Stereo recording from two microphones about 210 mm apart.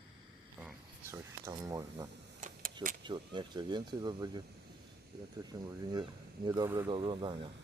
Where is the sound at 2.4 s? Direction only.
35° right (ahead or behind).